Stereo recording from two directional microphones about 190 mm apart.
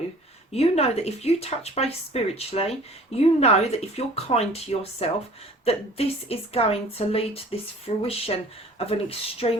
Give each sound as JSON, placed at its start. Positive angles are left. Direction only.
{"t": 0.5, "sound": "speech", "side_deg": 35}